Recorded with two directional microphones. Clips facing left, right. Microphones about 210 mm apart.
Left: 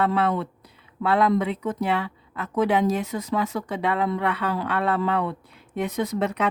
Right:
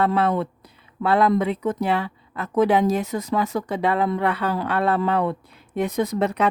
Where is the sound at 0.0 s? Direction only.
40° right (ahead or behind).